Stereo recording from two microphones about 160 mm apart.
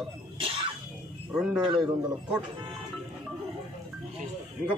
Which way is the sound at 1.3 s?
5° right (ahead or behind).